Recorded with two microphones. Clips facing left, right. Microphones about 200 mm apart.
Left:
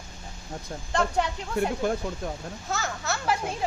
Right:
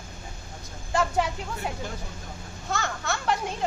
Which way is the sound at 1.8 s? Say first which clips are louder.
Left 11 dB; 55° left (ahead or behind).